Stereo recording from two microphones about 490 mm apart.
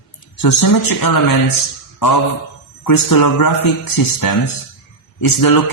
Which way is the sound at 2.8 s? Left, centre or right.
Left.